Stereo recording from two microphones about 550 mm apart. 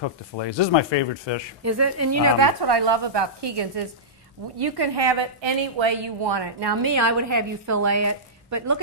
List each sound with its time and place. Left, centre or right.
0.0 s speech: left
1.6 s a woman's voice: right
6.9 s a woman's voice: right